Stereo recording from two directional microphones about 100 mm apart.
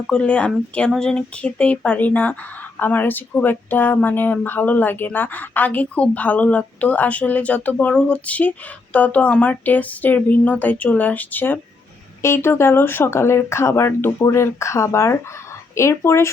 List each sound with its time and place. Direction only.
0.1 s speech: 10° left (ahead or behind); by 16.3 s 25° left (ahead or behind)